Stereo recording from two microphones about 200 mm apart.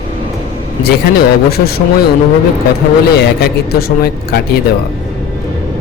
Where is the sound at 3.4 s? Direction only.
50° left (ahead or behind).